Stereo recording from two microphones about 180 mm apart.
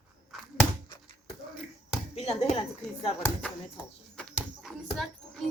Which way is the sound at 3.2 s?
5° left (ahead or behind).